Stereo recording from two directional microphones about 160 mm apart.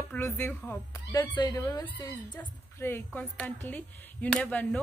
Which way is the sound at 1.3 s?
25° left (ahead or behind).